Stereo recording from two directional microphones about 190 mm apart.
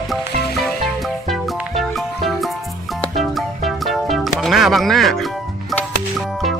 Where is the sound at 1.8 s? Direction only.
Centre (ahead or behind).